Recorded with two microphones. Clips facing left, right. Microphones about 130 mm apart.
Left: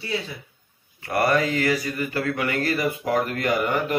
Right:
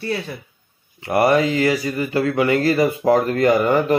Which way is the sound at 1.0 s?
20° right (ahead or behind).